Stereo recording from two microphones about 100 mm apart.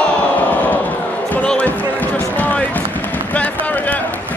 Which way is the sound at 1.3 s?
15° left (ahead or behind).